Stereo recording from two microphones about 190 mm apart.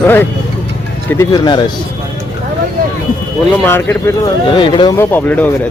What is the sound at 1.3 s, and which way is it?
Speech, 25° left (ahead or behind).